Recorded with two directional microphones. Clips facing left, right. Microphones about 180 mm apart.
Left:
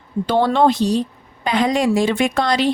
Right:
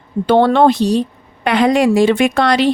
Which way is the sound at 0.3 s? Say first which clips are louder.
Right 5 dB; 60° right (ahead or behind).